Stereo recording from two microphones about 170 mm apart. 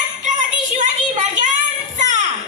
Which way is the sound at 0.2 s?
45° right (ahead or behind).